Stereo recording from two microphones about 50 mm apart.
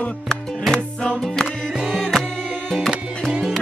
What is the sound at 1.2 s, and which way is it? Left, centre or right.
Music, centre.